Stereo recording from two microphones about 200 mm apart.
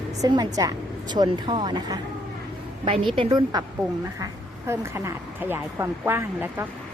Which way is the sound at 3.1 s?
25° right (ahead or behind).